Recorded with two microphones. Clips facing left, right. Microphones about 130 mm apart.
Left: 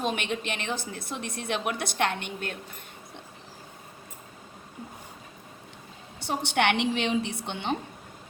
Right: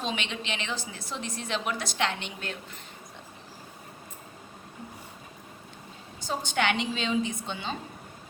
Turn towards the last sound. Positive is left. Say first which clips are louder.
# left 3 dB
turn(degrees=65)  # may be behind; listen again after turning